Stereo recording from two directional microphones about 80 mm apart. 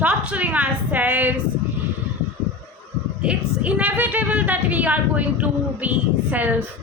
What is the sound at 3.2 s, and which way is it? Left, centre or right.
A woman's voice, centre.